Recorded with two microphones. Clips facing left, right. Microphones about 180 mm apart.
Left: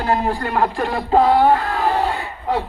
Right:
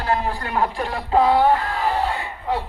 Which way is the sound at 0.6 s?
60° left (ahead or behind).